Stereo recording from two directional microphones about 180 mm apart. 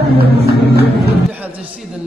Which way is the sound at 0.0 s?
60° right (ahead or behind).